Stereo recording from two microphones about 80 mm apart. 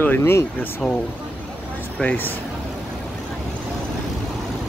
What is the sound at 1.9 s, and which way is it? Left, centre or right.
Speech, centre.